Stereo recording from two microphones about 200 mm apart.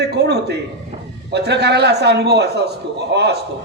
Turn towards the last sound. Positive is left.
turn(degrees=-55)  # may be behind; listen again after turning